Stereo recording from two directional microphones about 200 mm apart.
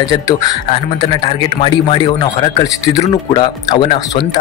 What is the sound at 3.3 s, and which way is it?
Speech, 20° left (ahead or behind).